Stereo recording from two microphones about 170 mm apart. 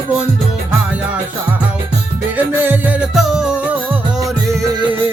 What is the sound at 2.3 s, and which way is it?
Music, 10° right (ahead or behind).